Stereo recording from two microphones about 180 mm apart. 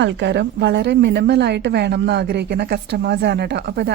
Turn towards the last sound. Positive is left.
turn(degrees=-70)  # may be behind; listen again after turning